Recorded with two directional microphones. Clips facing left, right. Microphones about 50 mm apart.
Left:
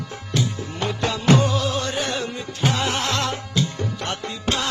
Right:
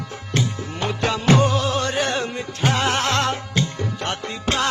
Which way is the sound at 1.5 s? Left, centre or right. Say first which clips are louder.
Right 2 dB; right.